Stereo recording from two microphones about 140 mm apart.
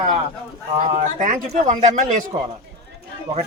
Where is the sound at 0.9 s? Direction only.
55° right (ahead or behind).